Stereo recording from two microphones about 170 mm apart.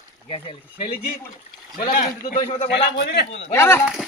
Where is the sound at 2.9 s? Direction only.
70° left (ahead or behind).